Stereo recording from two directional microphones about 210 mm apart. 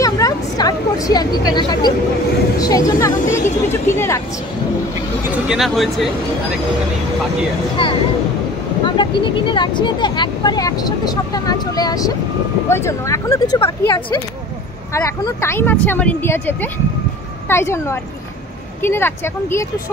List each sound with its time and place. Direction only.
0.0 s a sound: 15° left (ahead or behind)
2.6 s speech: 15° left (ahead or behind)
5.3 s speech: centre (ahead or behind)
7.8 s speech: 25° left (ahead or behind)